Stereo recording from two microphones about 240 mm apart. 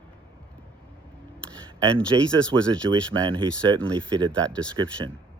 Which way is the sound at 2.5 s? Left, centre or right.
Centre.